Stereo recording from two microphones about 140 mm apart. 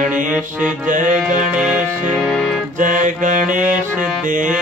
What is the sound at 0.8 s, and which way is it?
Music, 65° right (ahead or behind).